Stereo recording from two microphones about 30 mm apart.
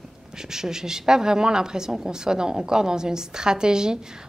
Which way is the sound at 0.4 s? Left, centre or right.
Centre.